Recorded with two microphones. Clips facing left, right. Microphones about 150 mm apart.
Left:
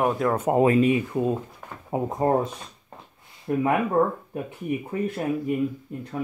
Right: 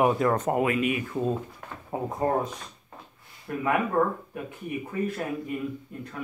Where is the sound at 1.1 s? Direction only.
15° left (ahead or behind).